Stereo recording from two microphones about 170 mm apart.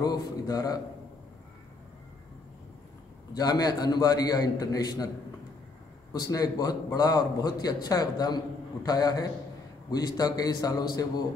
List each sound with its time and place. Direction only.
0.0 s a man's voice: 25° left (ahead or behind)
3.3 s a man's voice: 25° left (ahead or behind)
6.1 s a man's voice: 25° left (ahead or behind)